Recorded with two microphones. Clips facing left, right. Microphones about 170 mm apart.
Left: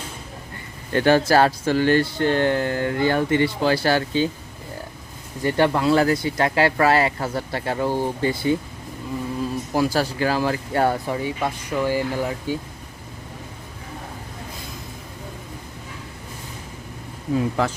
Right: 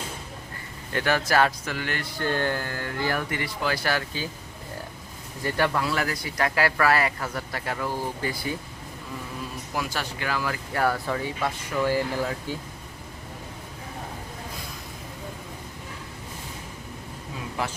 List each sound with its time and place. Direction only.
0.9 s speech: 30° left (ahead or behind)
5.4 s speech: 25° left (ahead or behind)
9.7 s speech: 35° left (ahead or behind); by 12.5 s 15° left (ahead or behind)